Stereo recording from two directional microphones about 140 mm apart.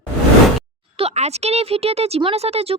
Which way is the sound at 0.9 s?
50° right (ahead or behind).